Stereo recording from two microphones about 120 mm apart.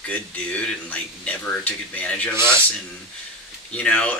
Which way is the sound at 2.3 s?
20° right (ahead or behind).